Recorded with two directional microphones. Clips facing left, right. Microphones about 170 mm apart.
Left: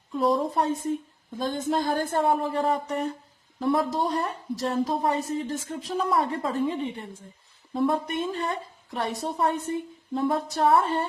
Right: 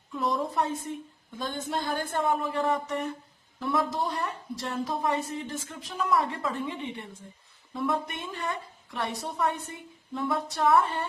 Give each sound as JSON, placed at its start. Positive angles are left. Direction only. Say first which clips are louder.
{"t": 0.2, "sound": "a woman's voice", "louder": "left 5 dB", "side_deg": 30}